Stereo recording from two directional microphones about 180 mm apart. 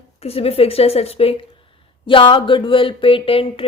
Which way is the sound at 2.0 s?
30° left (ahead or behind).